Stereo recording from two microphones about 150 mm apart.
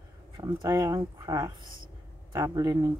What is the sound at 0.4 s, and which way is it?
Speech, 25° right (ahead or behind).